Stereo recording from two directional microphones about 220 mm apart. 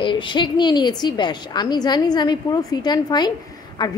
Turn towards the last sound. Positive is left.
turn(degrees=20)  # may be behind; listen again after turning